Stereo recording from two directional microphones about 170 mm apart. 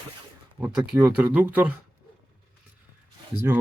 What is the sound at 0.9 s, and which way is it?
Speech, 10° right (ahead or behind).